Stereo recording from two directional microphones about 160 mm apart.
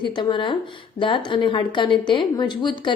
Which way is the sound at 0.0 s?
30° left (ahead or behind).